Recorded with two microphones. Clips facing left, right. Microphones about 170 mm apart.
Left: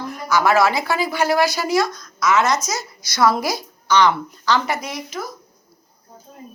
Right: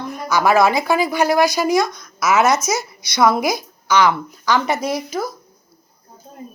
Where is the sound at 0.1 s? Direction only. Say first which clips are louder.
Right 1 dB; 20° right (ahead or behind).